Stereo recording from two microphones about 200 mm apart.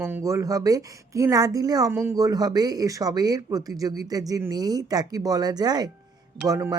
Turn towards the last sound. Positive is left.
turn(degrees=-15)  # may be behind; listen again after turning